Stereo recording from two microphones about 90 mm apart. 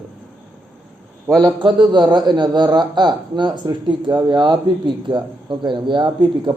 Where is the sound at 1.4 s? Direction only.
60° right (ahead or behind).